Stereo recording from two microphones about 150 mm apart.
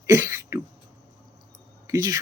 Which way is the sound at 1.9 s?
25° right (ahead or behind).